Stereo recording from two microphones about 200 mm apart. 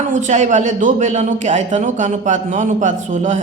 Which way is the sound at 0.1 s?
40° right (ahead or behind).